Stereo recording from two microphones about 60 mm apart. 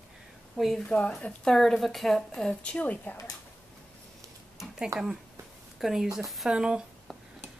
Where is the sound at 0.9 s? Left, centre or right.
Centre.